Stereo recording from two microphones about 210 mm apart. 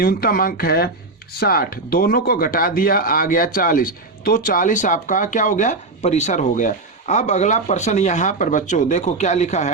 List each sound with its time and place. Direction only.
0.0 s speech: 45° left (ahead or behind)